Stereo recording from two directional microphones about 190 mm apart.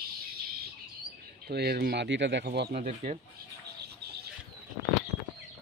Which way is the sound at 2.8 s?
40° right (ahead or behind).